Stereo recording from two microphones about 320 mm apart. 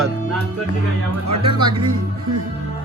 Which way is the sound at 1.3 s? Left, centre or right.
Centre.